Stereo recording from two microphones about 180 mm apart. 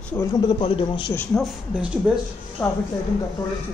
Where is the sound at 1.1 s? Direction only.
Centre (ahead or behind).